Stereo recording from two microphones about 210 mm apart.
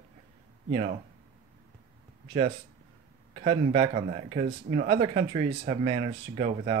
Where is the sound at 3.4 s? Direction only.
25° right (ahead or behind).